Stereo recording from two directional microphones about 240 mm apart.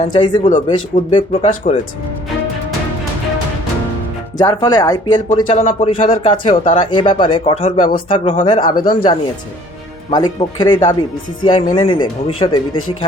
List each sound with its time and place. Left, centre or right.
0.0 s speech: left
4.4 s speech: centre